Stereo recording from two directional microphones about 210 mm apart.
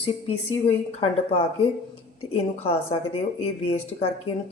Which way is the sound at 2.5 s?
25° left (ahead or behind).